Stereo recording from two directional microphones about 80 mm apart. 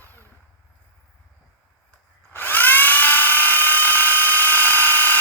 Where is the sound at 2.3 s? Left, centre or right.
Left.